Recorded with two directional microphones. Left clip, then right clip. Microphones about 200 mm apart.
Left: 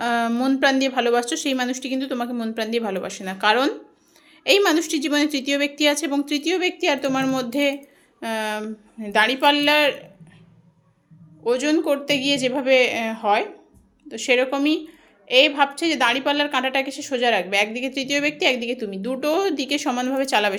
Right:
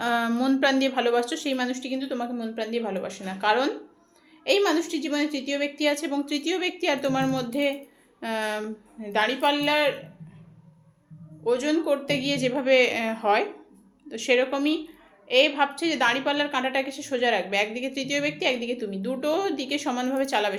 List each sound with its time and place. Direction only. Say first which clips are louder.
0.0 s a woman's voice: left 3 dB; 20° left (ahead or behind)
8.2 s a woman's voice: left 3 dB; 15° left (ahead or behind)
9.0 s a woman's voice: left 6 dB; 30° left (ahead or behind)
11.4 s a woman's voice: left 3 dB; 40° left (ahead or behind)